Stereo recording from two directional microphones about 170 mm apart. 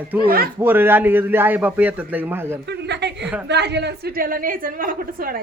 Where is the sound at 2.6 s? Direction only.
85° right; by 5.4 s 60° right (ahead or behind).